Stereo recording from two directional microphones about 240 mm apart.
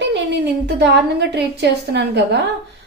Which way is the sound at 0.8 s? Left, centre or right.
Right.